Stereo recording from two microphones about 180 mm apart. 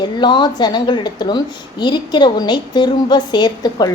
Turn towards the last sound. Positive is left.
turn(degrees=25)  # may be behind; listen again after turning